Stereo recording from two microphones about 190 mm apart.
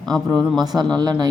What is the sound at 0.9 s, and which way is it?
Speech, 20° right (ahead or behind).